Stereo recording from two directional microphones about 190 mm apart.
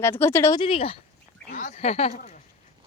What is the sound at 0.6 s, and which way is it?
Speech, 30° left (ahead or behind).